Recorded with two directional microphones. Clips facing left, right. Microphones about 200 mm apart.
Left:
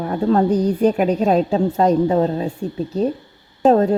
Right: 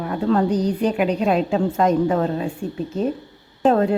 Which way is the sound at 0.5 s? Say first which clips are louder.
Left 3 dB; 50° left (ahead or behind).